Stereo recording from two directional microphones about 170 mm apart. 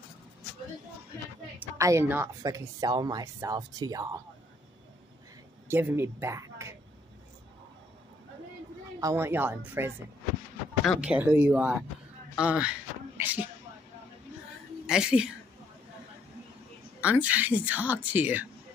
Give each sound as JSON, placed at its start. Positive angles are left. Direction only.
{"t": 1.6, "sound": "a woman's voice", "side_deg": -15}
{"t": 5.7, "sound": "a woman's voice", "side_deg": -15}
{"t": 9.0, "sound": "a woman's voice", "side_deg": -15}
{"t": 11.0, "sound": "a woman's voice", "side_deg": -10}
{"t": 13.2, "sound": "a sound", "side_deg": -10}
{"t": 14.9, "sound": "speech", "side_deg": -5}
{"t": 17.0, "sound": "a woman's voice", "side_deg": -10}